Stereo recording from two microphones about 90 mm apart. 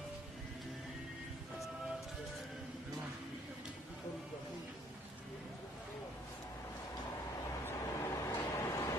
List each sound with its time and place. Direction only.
7.6 s vehicle: 30° left (ahead or behind)